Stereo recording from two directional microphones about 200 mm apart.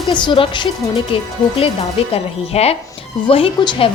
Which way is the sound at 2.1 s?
30° left (ahead or behind).